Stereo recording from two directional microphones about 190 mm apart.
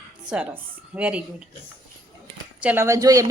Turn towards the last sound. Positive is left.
turn(degrees=-15)  # may be behind; listen again after turning